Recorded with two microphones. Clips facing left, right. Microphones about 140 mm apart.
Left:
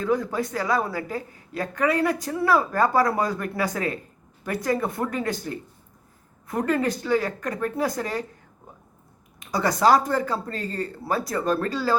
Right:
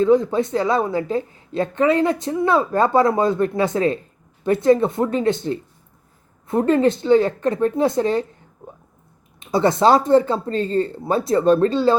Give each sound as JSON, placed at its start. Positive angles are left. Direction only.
{"t": 0.0, "sound": "a woman's voice", "side_deg": -25}
{"t": 9.4, "sound": "a woman's voice", "side_deg": -25}